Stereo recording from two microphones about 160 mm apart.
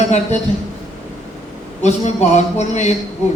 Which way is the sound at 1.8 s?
45° left (ahead or behind).